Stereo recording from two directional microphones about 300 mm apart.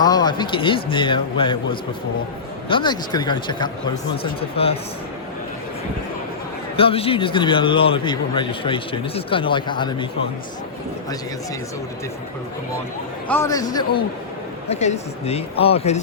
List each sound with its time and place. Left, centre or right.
0.0 s a man's voice: centre
6.7 s a man's voice: centre
13.2 s a man's voice: centre